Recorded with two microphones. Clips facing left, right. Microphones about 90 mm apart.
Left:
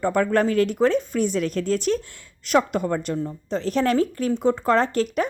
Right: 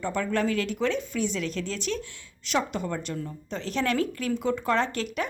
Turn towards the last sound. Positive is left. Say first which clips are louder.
# left 6 dB
turn(degrees=40)  # may be behind; listen again after turning